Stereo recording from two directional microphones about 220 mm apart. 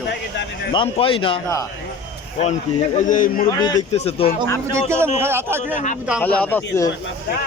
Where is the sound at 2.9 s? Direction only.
35° left (ahead or behind).